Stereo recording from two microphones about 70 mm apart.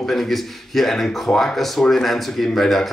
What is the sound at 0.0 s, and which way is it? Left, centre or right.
Speech, centre.